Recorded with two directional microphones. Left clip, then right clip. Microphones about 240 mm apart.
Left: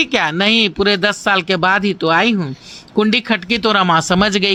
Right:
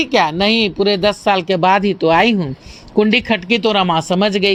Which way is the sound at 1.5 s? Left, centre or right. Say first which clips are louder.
Right 4 dB; left.